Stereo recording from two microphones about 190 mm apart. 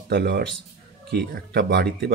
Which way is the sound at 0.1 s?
65° right (ahead or behind).